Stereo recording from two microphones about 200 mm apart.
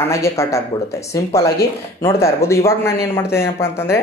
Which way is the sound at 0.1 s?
15° left (ahead or behind).